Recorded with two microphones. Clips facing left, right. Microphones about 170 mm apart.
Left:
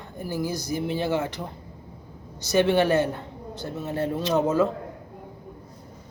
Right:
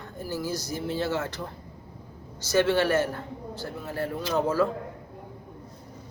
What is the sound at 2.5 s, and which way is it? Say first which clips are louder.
A man's voice: left 2 dB; 15° left (ahead or behind).